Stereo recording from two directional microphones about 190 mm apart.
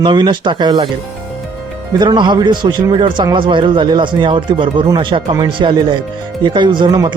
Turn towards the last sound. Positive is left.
turn(degrees=-25)  # may be behind; listen again after turning